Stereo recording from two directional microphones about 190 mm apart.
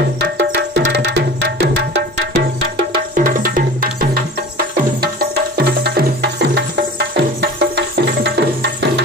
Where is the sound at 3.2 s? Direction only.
45° right (ahead or behind).